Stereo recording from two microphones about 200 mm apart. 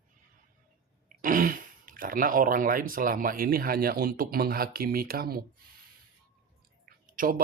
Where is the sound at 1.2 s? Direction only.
40° right (ahead or behind).